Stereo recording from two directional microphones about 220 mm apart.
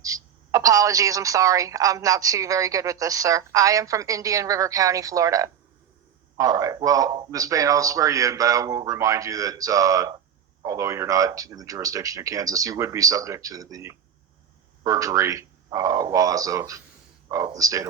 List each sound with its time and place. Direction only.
0.0 s a woman's voice: 15° right (ahead or behind)